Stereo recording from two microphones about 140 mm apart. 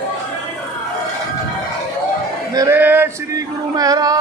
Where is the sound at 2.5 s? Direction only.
25° right (ahead or behind).